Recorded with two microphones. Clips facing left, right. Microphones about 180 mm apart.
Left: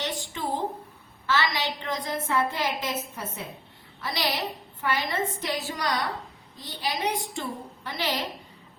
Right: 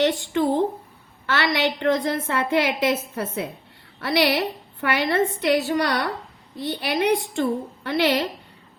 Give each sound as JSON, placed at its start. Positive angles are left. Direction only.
{"t": 0.0, "sound": "a woman's voice", "side_deg": -65}